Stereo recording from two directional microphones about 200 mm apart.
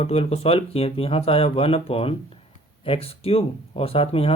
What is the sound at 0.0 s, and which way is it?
Speech, 30° left (ahead or behind).